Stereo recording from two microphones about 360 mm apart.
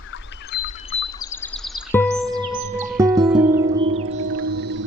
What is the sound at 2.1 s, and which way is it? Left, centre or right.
Music, centre.